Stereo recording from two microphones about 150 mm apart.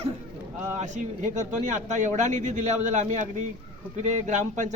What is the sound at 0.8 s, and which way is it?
A man's voice, 55° right (ahead or behind).